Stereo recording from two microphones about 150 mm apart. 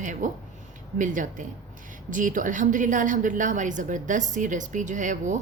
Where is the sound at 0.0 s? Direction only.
55° right (ahead or behind).